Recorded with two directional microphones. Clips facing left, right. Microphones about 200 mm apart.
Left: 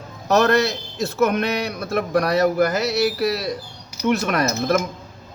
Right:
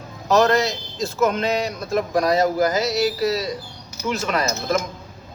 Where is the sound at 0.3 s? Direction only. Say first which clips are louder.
Even; 65° left (ahead or behind).